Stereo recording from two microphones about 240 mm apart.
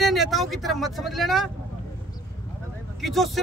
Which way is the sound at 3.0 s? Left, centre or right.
Centre.